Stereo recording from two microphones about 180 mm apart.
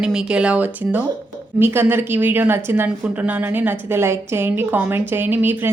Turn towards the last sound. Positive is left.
turn(degrees=-10)  # may be behind; listen again after turning